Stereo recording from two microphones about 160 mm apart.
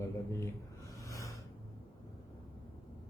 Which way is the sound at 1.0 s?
20° left (ahead or behind).